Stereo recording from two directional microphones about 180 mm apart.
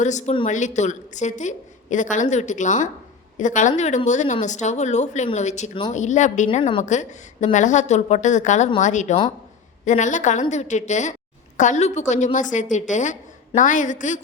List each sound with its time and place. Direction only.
0.0 s a woman's voice: 40° left (ahead or behind)
6.6 s a woman's voice: 30° left (ahead or behind)
6.8 s a woman's voice: 40° left (ahead or behind)